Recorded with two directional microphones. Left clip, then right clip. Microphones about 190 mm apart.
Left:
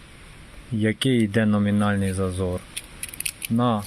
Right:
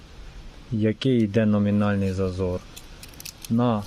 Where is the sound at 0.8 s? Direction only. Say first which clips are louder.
Left 1 dB; 15° right (ahead or behind).